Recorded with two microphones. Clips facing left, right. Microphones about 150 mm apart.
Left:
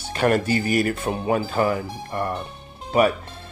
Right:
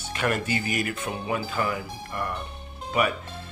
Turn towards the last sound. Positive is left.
turn(degrees=35)  # may be behind; listen again after turning